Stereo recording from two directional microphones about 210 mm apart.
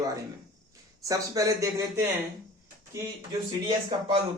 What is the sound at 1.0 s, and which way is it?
Speech, 15° right (ahead or behind).